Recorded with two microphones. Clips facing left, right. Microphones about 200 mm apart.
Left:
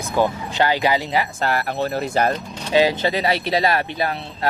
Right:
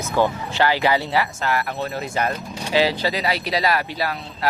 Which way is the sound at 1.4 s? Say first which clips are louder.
Left 2 dB; 35° left (ahead or behind).